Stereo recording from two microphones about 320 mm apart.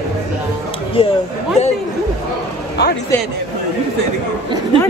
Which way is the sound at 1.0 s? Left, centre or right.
Centre.